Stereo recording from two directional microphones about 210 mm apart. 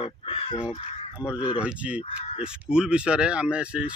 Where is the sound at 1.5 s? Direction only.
5° right (ahead or behind).